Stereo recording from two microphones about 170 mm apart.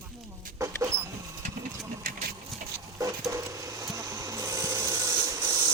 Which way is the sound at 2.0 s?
60° right (ahead or behind).